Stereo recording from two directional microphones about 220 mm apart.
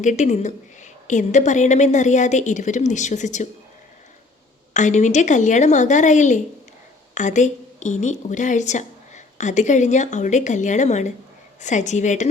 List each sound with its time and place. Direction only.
0.0 s a woman's voice: 35° left (ahead or behind)
4.7 s a woman's voice: 35° left (ahead or behind)